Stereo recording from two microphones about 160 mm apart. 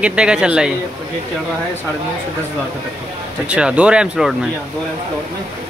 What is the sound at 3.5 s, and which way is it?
Speech, 5° right (ahead or behind).